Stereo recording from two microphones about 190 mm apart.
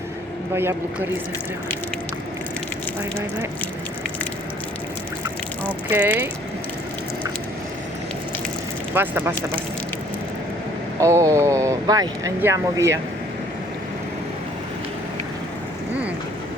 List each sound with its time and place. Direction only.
0.5 s speech: 10° right (ahead or behind)
5.9 s speech: 10° right (ahead or behind)
9.0 s speech: 10° right (ahead or behind)
11.0 s speech: 15° right (ahead or behind)